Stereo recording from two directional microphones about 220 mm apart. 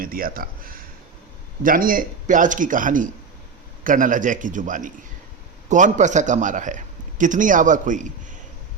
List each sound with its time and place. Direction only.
0.0 s a man's voice: 40° right (ahead or behind)